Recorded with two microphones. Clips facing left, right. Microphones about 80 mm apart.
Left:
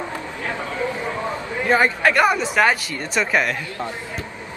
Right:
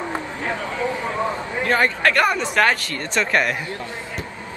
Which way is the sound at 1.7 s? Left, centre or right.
Centre.